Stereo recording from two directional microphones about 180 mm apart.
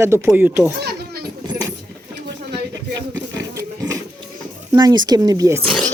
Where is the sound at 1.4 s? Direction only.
20° right (ahead or behind).